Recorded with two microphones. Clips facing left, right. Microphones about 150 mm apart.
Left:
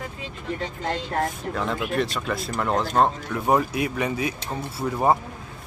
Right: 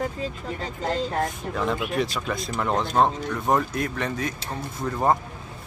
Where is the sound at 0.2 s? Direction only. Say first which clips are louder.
Even; 40° right (ahead or behind).